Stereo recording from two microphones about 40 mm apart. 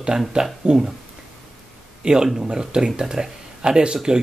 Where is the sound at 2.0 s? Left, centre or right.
Centre.